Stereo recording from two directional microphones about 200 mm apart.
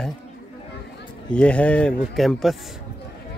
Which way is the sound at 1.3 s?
5° left (ahead or behind).